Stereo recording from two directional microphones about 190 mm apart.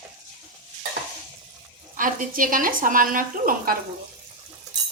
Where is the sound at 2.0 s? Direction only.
45° right (ahead or behind).